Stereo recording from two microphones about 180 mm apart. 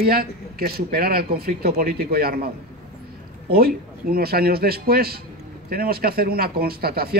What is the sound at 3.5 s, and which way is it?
Speech, 60° right (ahead or behind).